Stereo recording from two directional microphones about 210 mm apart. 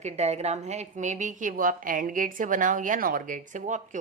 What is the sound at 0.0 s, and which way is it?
A woman's voice, 30° right (ahead or behind).